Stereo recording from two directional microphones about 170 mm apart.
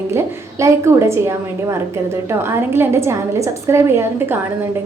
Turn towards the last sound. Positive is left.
turn(degrees=-15)  # may be behind; listen again after turning